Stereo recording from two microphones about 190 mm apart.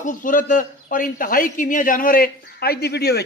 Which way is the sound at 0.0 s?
45° left (ahead or behind).